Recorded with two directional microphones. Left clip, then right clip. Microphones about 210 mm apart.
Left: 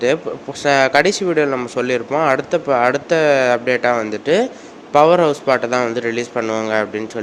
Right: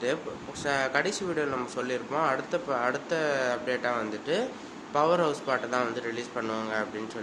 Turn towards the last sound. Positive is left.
turn(degrees=35)  # may be behind; listen again after turning